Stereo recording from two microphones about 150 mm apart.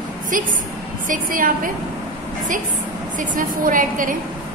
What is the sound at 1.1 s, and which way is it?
Speech, 65° right (ahead or behind).